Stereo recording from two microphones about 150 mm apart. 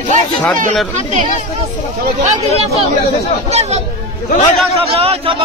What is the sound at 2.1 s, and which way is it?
Speech, 45° right (ahead or behind).